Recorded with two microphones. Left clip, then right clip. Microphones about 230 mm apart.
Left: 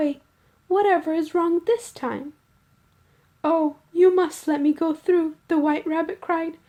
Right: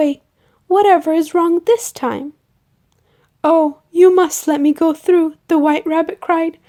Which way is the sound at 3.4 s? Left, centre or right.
Right.